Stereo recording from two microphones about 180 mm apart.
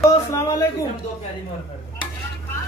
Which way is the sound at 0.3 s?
15° left (ahead or behind).